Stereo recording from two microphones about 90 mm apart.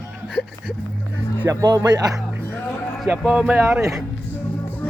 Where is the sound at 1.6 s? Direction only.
45° right (ahead or behind).